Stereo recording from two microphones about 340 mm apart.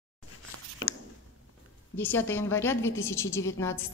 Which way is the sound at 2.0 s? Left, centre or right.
Centre.